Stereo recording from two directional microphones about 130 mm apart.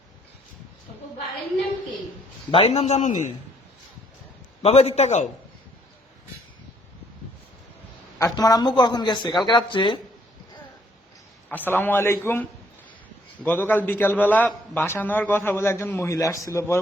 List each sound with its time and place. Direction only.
2.5 s a man's voice: 45° left (ahead or behind); by 3.2 s 65° left (ahead or behind)
4.6 s a man's voice: 55° left (ahead or behind)
8.2 s speech: 30° left (ahead or behind)
11.4 s a man's voice: 15° left (ahead or behind)